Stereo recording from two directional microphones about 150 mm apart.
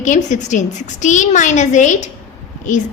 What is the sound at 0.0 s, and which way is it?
A woman's voice, 55° left (ahead or behind).